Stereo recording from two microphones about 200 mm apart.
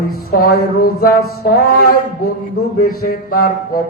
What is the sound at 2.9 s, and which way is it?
Mantra, 50° left (ahead or behind).